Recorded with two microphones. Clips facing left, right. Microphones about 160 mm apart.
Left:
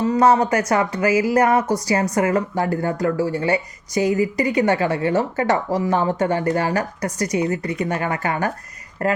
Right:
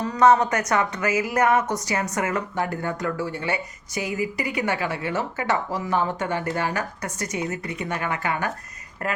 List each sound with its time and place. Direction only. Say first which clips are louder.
0.0 s speech: left 2 dB; 30° left (ahead or behind)